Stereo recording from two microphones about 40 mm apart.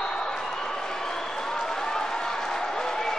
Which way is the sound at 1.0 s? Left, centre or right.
Centre.